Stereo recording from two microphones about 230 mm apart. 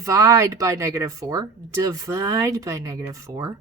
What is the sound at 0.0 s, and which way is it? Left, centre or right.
Speech, centre.